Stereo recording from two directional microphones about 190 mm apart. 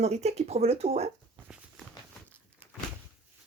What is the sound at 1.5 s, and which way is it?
Walk, 5° right (ahead or behind).